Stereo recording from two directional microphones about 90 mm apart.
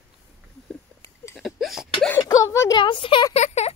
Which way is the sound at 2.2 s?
35° left (ahead or behind).